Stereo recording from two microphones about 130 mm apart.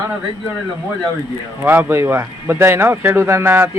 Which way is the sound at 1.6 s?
15° right (ahead or behind).